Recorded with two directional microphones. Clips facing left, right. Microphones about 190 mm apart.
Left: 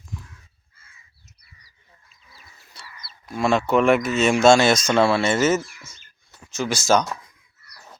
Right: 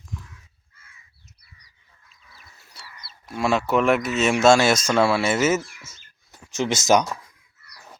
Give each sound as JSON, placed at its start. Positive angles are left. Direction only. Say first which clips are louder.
{"t": 2.8, "sound": "a sound", "louder": "left 1 dB", "side_deg": -5}
{"t": 3.2, "sound": "speech", "louder": "left 2 dB", "side_deg": -5}
{"t": 6.5, "sound": "speech", "louder": "right 1 dB", "side_deg": -20}